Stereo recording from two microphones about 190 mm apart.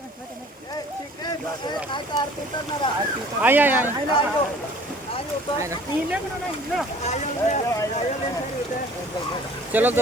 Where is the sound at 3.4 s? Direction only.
10° right (ahead or behind).